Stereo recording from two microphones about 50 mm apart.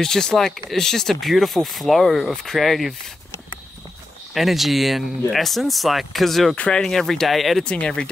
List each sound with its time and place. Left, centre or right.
0.0 s speech: centre
4.3 s speech: centre
7.6 s speech: left